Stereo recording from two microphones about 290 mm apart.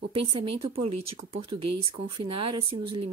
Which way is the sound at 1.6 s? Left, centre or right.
Right.